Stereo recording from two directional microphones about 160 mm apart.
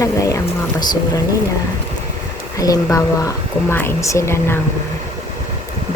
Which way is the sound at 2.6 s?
20° left (ahead or behind).